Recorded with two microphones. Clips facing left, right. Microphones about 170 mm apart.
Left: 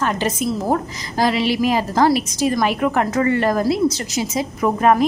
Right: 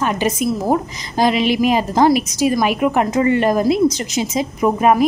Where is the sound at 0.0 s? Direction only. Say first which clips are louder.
Right 2 dB; 15° right (ahead or behind).